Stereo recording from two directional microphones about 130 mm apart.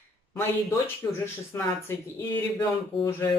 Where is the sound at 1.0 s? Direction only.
20° left (ahead or behind).